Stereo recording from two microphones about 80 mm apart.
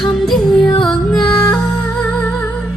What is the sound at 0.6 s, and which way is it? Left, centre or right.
Music, left.